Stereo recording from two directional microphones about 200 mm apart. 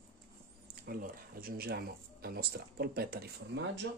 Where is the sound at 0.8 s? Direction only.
45° right (ahead or behind).